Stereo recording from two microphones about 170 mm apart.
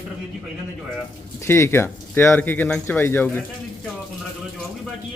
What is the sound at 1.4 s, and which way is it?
Speech, 15° left (ahead or behind).